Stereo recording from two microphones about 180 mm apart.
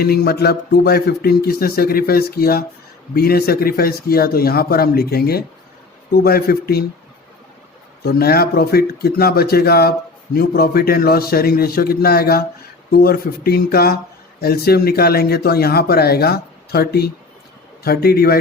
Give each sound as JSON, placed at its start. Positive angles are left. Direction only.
{"t": 0.0, "sound": "speech", "side_deg": 60}
{"t": 8.0, "sound": "speech", "side_deg": 60}